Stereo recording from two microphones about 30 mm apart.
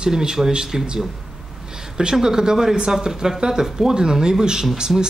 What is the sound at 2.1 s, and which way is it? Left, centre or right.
Speech, right.